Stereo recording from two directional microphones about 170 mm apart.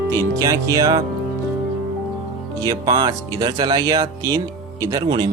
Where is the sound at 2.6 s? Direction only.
20° right (ahead or behind).